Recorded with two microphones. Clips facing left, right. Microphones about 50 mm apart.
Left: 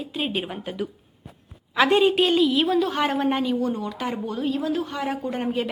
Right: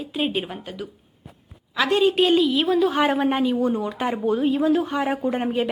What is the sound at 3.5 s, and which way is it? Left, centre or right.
A woman's voice, right.